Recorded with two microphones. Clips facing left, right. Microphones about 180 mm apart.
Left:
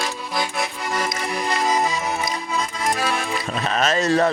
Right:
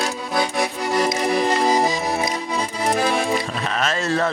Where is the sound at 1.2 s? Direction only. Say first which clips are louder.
Right 3 dB; 35° right (ahead or behind).